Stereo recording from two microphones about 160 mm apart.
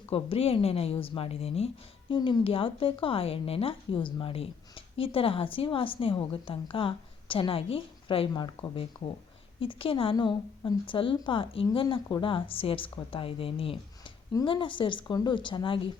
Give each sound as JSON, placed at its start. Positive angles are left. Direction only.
{"t": 0.1, "sound": "a woman's voice", "side_deg": 35}